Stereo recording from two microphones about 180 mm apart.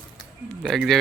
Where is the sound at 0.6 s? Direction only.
Centre (ahead or behind).